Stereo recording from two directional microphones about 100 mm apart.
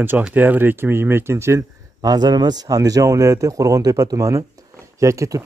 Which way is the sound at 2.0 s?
40° right (ahead or behind).